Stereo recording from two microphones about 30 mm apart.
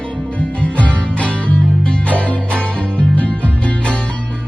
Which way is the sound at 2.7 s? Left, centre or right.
Left.